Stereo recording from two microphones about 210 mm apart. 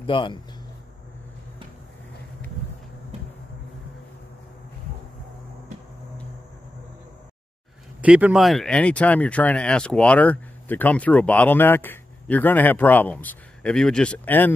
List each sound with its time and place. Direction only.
0.0 s speech: 25° left (ahead or behind)
8.0 s speech: 5° right (ahead or behind)